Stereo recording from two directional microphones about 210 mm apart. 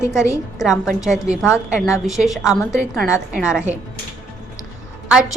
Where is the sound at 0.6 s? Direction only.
Centre (ahead or behind).